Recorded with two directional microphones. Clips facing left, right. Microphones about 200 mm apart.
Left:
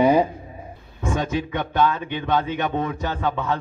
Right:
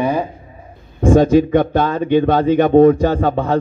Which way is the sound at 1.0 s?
35° right (ahead or behind).